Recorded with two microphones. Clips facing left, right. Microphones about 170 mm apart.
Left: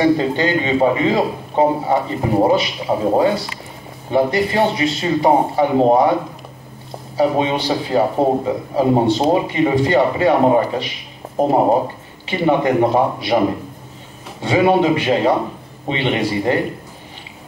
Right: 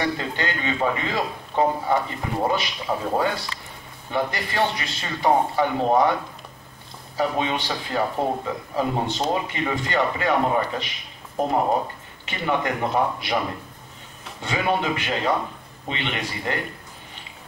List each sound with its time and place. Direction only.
0.0 s a man's voice: 30° left (ahead or behind)
7.2 s a man's voice: 35° left (ahead or behind)
14.5 s a man's voice: 35° left (ahead or behind)